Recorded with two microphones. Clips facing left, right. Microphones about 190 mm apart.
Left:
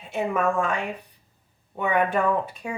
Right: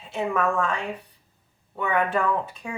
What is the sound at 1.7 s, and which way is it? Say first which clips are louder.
Speech: left 1 dB; 15° left (ahead or behind).